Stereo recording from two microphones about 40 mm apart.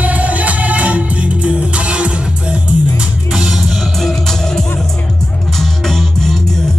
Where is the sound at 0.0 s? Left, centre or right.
Right.